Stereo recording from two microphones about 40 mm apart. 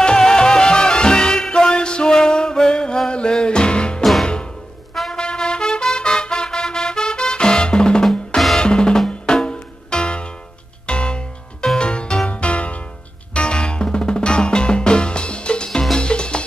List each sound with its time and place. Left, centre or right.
0.0 s music: centre
4.0 s music: centre
5.1 s trumpet: centre
6.0 s music: centre
8.5 s drum: left
9.2 s music: left
11.6 s music: centre
11.9 s music: left
13.3 s music: centre